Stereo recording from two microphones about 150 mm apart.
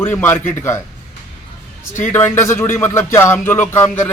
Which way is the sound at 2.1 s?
15° left (ahead or behind).